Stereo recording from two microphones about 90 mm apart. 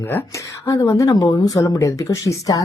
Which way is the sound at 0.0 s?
25° left (ahead or behind).